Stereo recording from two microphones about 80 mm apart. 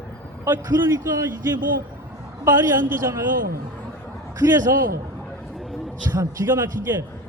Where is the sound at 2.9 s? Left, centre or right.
Right.